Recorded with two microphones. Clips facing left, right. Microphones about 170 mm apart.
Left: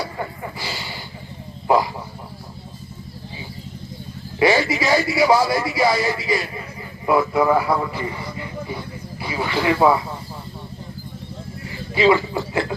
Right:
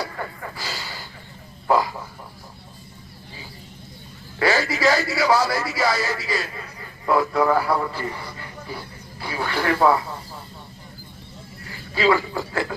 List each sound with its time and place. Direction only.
0.0 s vehicle: 15° left (ahead or behind)
1.6 s wild animals: 15° left (ahead or behind)
4.4 s a sound: 15° left (ahead or behind)
4.7 s a man's voice: 15° left (ahead or behind)
11.9 s speech: 15° left (ahead or behind)